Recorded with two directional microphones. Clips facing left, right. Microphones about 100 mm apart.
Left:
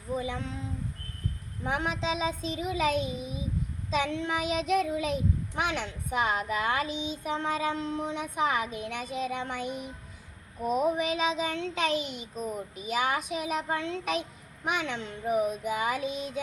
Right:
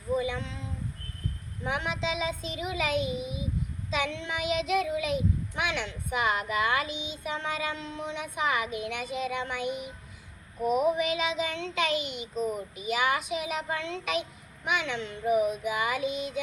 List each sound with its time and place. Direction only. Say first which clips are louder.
1.6 s a child's voice: left 1 dB; 40° left (ahead or behind)